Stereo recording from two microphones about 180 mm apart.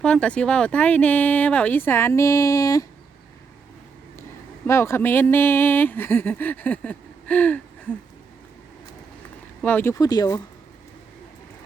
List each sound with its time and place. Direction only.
0.0 s speech: 5° left (ahead or behind)
4.6 s speech: 15° left (ahead or behind)
9.6 s speech: 10° left (ahead or behind)